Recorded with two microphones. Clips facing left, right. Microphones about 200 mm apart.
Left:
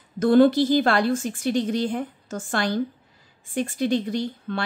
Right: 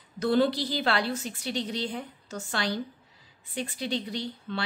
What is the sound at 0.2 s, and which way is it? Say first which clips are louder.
A woman's voice: left 8 dB; 50° left (ahead or behind).